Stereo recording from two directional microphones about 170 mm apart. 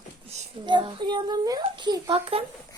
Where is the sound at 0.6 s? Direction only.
25° right (ahead or behind).